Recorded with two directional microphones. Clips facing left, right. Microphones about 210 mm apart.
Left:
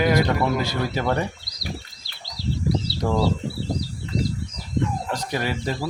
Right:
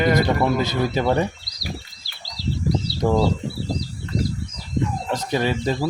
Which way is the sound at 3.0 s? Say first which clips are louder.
Right 4 dB; 25° right (ahead or behind).